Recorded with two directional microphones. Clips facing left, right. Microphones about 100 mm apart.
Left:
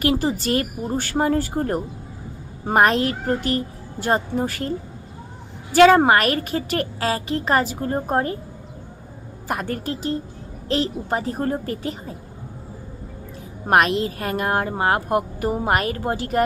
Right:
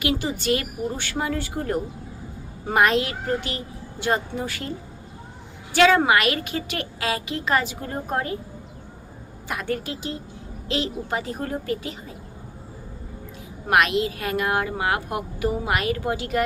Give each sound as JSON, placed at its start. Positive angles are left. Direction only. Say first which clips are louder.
{"t": 0.0, "sound": "a woman's voice", "louder": "left 4 dB", "side_deg": 40}
{"t": 5.7, "sound": "a woman's voice", "louder": "left 4 dB", "side_deg": 40}
{"t": 9.5, "sound": "a woman's voice", "louder": "left 2 dB", "side_deg": 40}
{"t": 13.7, "sound": "a woman's voice", "louder": "left 2 dB", "side_deg": 40}